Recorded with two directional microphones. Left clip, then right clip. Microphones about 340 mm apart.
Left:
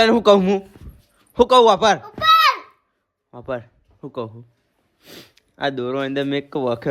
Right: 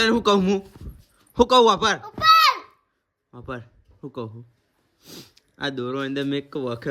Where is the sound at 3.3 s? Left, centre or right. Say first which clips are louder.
Left 7 dB; centre.